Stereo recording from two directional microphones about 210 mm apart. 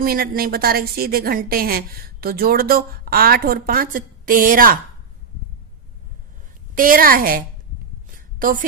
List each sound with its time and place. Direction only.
0.0 s a woman's voice: 45° right (ahead or behind)
6.7 s a woman's voice: 40° right (ahead or behind)
8.1 s a sound: 40° right (ahead or behind)